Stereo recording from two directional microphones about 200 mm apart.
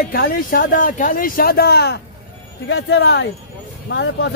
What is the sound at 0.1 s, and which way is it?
A man's voice, 45° left (ahead or behind).